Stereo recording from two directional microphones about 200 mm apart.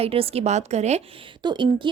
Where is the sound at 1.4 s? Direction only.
25° right (ahead or behind).